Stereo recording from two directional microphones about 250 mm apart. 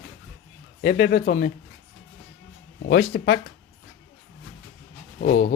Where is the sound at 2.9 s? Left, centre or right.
Left.